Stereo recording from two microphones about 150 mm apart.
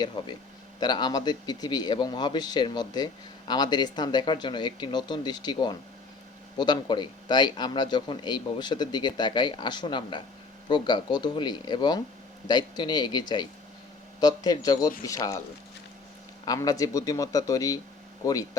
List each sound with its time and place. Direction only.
0.2 s speech: 30° left (ahead or behind)
16.5 s speech: 25° left (ahead or behind)